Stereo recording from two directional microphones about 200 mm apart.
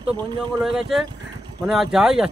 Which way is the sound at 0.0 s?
25° right (ahead or behind).